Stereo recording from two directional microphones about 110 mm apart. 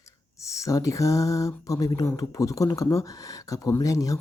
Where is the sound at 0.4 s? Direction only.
30° left (ahead or behind).